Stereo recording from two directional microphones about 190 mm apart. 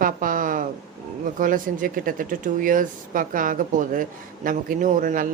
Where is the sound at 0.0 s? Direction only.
45° right (ahead or behind).